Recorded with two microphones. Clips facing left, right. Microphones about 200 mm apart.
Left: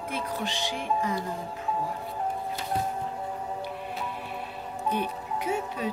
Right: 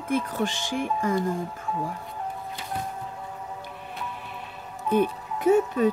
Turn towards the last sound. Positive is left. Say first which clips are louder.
# right 10 dB
turn(degrees=-50)  # may be behind; listen again after turning